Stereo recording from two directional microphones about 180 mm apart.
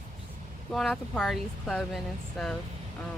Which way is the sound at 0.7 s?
Centre (ahead or behind).